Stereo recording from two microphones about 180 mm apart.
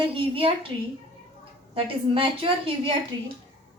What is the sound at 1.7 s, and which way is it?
A woman's voice, 30° right (ahead or behind).